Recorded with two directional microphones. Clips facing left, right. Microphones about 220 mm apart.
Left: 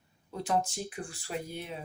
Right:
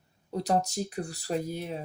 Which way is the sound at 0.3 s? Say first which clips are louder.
Right 3 dB; 40° right (ahead or behind).